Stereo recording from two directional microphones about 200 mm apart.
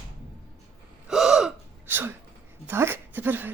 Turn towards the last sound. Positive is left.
turn(degrees=-10)  # may be behind; listen again after turning